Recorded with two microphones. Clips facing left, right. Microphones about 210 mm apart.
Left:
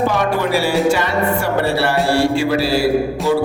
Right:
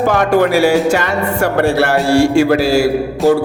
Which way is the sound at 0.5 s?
45° right (ahead or behind).